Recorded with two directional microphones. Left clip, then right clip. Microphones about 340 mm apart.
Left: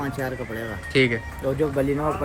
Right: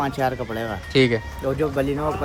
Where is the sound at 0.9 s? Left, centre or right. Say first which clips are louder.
Right 2 dB; centre.